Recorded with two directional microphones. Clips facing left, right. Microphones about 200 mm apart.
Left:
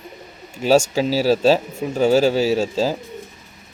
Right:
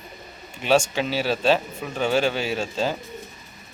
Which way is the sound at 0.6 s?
40° left (ahead or behind).